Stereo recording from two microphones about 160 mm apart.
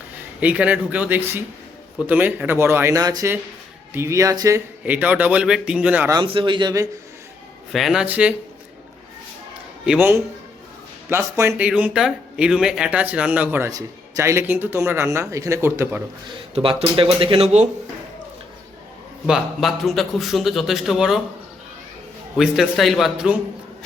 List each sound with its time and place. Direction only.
0.3 s speech: 10° right (ahead or behind)
4.8 s speech: 10° right (ahead or behind)
6.2 s speech: 30° right (ahead or behind)
7.7 s a man's voice: centre (ahead or behind)
9.8 s speech: 10° right (ahead or behind)
16.6 s speech: 30° right (ahead or behind)
19.3 s a man's voice: centre (ahead or behind)
22.4 s a man's voice: centre (ahead or behind)